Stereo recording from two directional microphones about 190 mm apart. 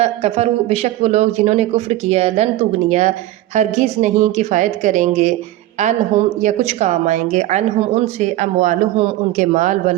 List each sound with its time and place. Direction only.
0.0 s speech: 30° right (ahead or behind)